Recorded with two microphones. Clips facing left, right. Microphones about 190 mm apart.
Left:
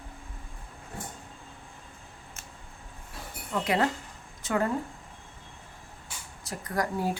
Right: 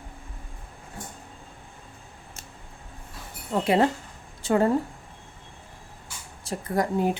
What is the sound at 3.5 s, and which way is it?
A woman's voice, 30° right (ahead or behind).